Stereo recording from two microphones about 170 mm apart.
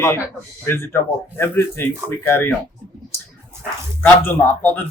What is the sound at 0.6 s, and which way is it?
Speech, 15° left (ahead or behind).